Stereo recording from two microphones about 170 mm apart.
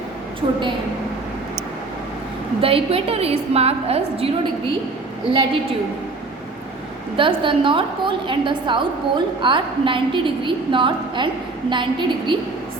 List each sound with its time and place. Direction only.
0.4 s a woman's voice: 30° right (ahead or behind)
2.6 s a woman's voice: 35° right (ahead or behind)
7.2 s a woman's voice: 30° right (ahead or behind)